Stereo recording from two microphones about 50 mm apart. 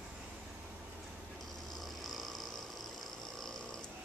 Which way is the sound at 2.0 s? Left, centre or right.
Centre.